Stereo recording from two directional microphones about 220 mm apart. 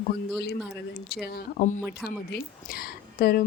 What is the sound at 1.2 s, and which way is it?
Speech, 45° left (ahead or behind).